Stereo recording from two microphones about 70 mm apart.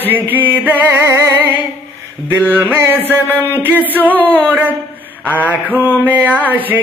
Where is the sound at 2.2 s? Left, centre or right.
Right.